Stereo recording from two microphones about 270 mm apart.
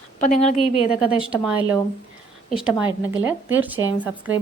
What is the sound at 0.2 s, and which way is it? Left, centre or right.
Speech, left.